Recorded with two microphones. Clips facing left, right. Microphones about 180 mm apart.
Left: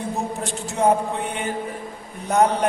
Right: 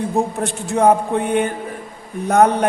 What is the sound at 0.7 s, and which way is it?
A man's voice, 55° right (ahead or behind).